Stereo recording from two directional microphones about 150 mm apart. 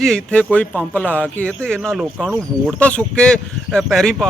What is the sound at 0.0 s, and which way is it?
Speech, 5° left (ahead or behind).